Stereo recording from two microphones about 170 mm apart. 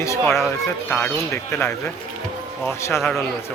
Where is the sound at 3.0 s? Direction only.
Centre (ahead or behind).